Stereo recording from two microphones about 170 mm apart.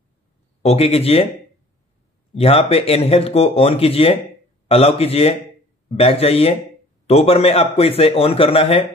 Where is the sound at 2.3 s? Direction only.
35° left (ahead or behind).